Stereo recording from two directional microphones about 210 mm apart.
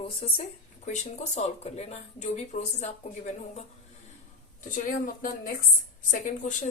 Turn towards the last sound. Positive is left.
turn(degrees=35)  # may be behind; listen again after turning